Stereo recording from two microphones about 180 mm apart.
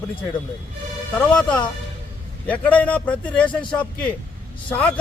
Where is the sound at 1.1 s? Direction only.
10° left (ahead or behind).